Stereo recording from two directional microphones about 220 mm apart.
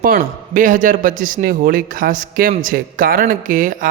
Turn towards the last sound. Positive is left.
turn(degrees=-35)  # may be behind; listen again after turning